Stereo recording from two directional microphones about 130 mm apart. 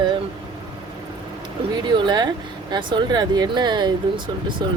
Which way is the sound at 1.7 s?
35° right (ahead or behind).